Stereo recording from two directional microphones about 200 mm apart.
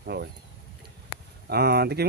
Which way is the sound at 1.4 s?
50° right (ahead or behind).